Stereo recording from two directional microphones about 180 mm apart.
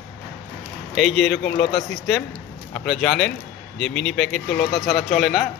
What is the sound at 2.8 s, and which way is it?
A man's voice, 5° left (ahead or behind).